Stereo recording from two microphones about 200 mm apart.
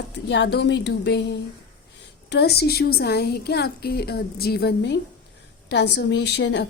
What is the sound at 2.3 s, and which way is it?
A woman's voice, 55° left (ahead or behind).